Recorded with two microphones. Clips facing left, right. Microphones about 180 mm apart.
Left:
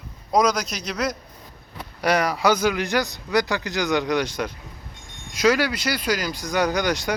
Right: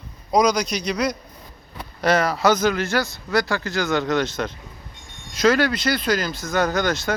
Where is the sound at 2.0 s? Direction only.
10° left (ahead or behind).